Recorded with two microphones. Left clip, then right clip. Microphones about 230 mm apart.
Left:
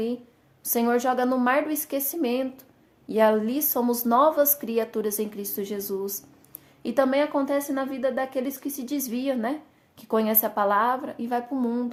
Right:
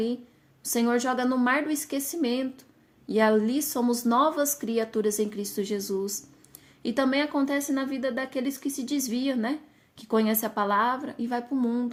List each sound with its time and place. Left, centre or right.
0.6 s a woman's voice: right